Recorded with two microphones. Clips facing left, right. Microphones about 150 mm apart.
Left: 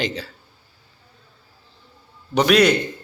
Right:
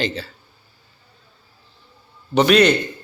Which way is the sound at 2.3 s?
5° left (ahead or behind).